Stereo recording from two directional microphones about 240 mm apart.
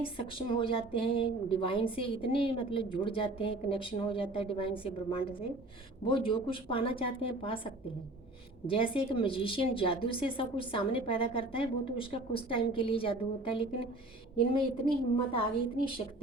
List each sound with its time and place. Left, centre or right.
0.0 s a woman's voice: left
15.3 s a woman's voice: left